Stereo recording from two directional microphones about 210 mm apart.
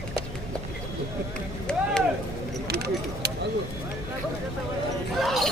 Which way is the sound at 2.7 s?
50° right (ahead or behind).